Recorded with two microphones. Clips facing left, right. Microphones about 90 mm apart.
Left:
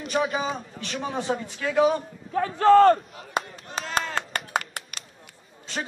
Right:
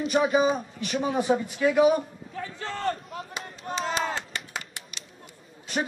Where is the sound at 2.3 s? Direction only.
60° left (ahead or behind).